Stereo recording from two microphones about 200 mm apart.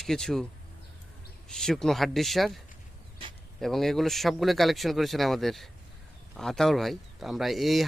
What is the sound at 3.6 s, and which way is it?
Speech, centre (ahead or behind).